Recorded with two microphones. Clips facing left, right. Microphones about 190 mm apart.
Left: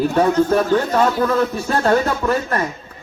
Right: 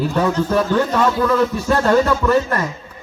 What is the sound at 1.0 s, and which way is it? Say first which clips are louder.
A man's voice: right 1 dB; 45° left (ahead or behind).